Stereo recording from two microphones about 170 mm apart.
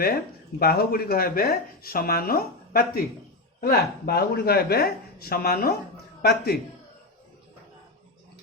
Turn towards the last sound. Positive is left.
turn(degrees=70)  # may be behind; listen again after turning